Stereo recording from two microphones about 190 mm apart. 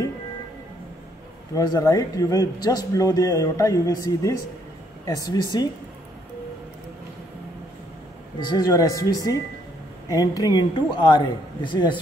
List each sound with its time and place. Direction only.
1.5 s speech: 20° left (ahead or behind)
8.4 s speech: 20° left (ahead or behind)